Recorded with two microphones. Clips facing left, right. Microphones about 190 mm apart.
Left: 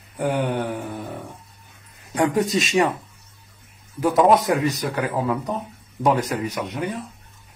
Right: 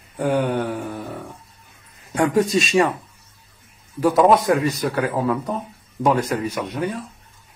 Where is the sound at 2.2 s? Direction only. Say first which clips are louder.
Right 2 dB; 20° left (ahead or behind).